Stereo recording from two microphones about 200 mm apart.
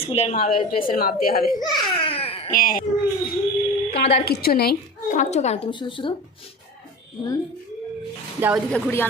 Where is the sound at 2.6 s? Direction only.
45° left (ahead or behind).